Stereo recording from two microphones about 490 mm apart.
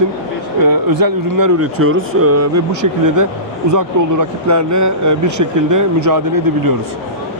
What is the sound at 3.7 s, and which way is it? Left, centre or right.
Speech, right.